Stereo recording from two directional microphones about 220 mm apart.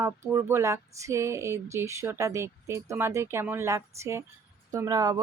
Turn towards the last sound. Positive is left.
turn(degrees=-15)  # may be behind; listen again after turning